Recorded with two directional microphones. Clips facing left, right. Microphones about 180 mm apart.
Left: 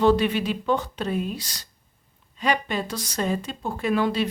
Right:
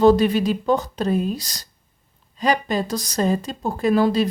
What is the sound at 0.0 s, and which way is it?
Speech, 40° right (ahead or behind).